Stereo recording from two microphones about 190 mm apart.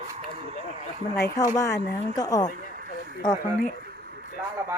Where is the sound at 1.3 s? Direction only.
15° left (ahead or behind).